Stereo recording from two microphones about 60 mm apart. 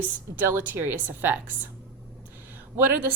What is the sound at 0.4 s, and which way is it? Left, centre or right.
A woman's voice, right.